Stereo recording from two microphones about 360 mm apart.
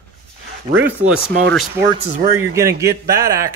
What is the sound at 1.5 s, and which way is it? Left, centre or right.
Speech, centre.